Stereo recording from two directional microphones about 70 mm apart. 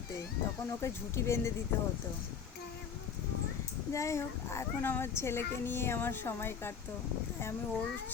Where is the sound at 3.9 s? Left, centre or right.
Left.